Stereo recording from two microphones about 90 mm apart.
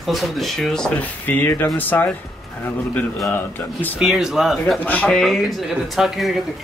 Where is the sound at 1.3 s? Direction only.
20° left (ahead or behind).